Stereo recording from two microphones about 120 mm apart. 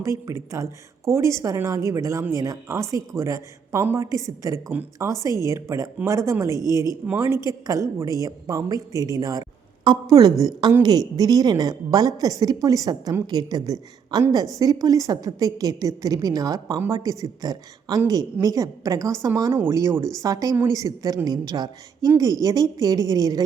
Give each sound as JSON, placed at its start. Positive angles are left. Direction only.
{"t": 0.0, "sound": "a woman's voice", "side_deg": -25}